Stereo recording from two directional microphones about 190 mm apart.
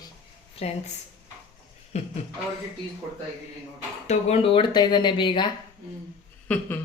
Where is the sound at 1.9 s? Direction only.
35° left (ahead or behind).